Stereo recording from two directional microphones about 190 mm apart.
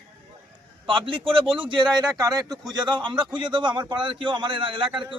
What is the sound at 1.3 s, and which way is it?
A man's voice, 25° right (ahead or behind).